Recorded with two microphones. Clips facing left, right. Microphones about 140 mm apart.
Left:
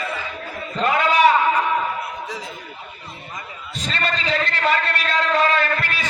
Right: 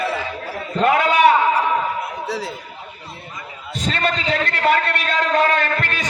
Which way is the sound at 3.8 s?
55° right (ahead or behind).